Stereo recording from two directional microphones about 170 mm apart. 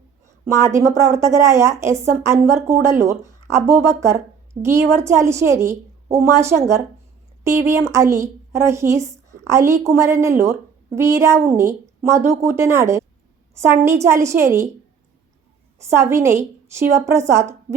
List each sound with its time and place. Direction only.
0.3 s a woman's voice: 15° right (ahead or behind)
7.7 s a woman's voice: 15° right (ahead or behind)
15.8 s a woman's voice: 15° right (ahead or behind)